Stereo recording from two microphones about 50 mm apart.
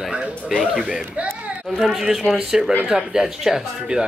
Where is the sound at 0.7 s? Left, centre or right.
Centre.